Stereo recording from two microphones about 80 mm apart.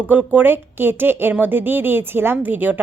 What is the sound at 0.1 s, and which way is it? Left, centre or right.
Speech, right.